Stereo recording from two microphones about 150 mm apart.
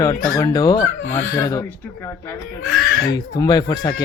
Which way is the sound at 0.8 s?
60° left (ahead or behind).